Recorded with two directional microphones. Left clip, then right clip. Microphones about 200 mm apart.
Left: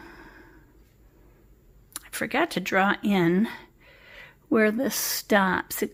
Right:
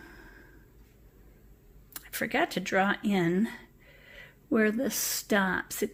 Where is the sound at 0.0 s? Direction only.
25° left (ahead or behind).